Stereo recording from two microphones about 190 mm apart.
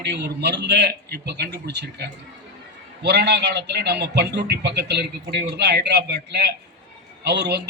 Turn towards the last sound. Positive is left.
turn(degrees=-60)  # may be behind; listen again after turning